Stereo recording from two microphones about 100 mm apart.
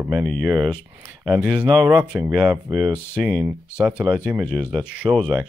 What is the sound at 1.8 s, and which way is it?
Speech, 10° right (ahead or behind).